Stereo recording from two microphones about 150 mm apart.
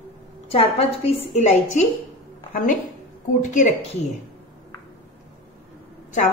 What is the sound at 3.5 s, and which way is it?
Speech, 55° left (ahead or behind).